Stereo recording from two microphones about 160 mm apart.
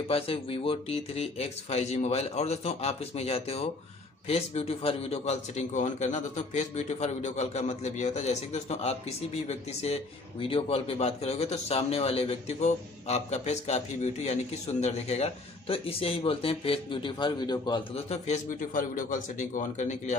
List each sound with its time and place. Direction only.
0.1 s a man's voice: 35° left (ahead or behind)
18.1 s a man's voice: 45° left (ahead or behind)